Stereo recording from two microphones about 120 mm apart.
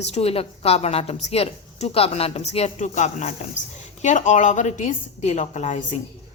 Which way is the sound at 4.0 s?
85° left.